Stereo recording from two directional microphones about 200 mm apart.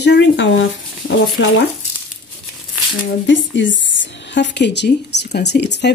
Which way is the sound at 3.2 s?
65° left (ahead or behind).